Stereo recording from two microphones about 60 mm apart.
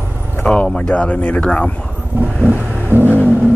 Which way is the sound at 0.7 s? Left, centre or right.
Centre.